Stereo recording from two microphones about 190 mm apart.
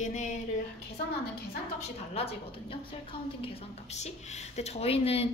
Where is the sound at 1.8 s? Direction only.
30° left (ahead or behind).